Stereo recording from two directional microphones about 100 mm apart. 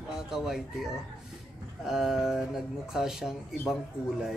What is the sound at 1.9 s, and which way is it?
Speech, 5° right (ahead or behind).